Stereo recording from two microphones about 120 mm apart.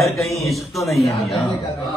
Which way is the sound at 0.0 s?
Centre (ahead or behind).